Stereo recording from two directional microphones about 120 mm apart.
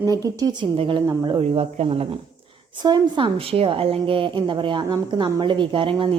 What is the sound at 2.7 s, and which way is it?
A woman's voice, 35° right (ahead or behind).